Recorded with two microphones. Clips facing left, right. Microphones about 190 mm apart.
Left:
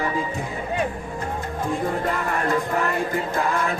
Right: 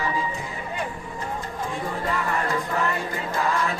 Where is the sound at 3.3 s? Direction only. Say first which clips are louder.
Right 1 dB; 55° left (ahead or behind).